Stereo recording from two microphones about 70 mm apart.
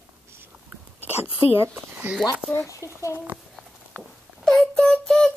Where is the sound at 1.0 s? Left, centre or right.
Right.